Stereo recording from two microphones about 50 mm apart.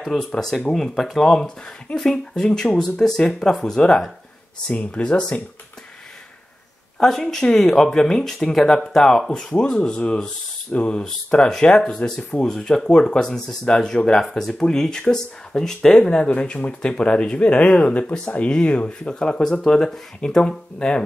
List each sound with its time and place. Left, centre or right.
0.0 s speech: centre
7.0 s speech: centre